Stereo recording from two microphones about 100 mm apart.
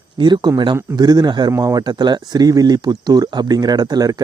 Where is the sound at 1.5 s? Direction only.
35° right (ahead or behind).